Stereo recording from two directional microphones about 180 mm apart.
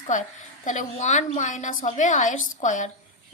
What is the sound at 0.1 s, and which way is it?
A woman's voice, 45° left (ahead or behind).